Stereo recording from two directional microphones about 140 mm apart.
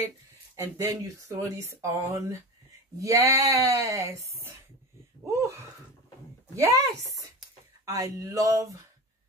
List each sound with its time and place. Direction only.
0.6 s speech: 20° right (ahead or behind)
5.2 s speech: 20° right (ahead or behind)